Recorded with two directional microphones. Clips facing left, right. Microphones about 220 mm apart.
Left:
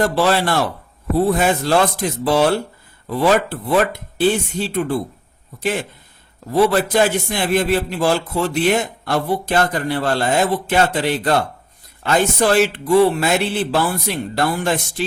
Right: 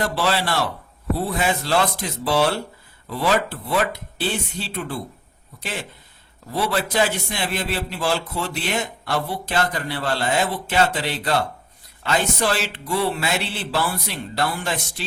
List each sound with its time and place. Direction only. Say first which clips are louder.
0.0 s a man's voice: left 6 dB; 50° left (ahead or behind)
6.5 s a man's voice: left 8 dB; 50° left (ahead or behind)